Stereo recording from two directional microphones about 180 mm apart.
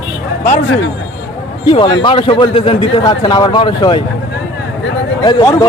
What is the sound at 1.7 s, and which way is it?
A man's voice, 25° left (ahead or behind).